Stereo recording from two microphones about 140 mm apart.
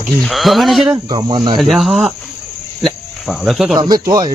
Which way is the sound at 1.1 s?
30° right (ahead or behind).